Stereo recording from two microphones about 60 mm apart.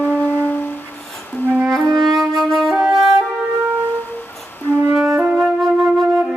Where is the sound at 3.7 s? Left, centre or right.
Left.